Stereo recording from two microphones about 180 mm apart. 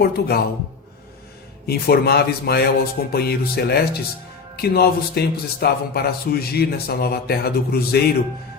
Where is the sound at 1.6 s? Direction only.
60° left (ahead or behind).